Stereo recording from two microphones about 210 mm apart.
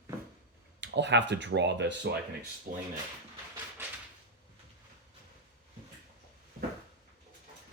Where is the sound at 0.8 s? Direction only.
55° right (ahead or behind).